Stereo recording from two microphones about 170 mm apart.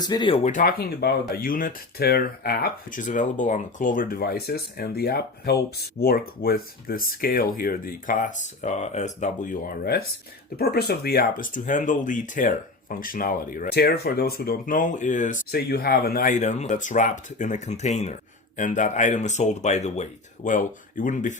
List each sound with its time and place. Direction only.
0.0 s speech: 25° left (ahead or behind)
0.4 s speech: 55° left (ahead or behind)